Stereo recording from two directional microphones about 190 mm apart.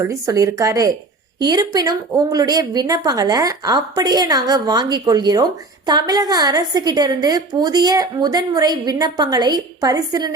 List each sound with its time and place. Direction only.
0.0 s a woman's voice: 15° right (ahead or behind)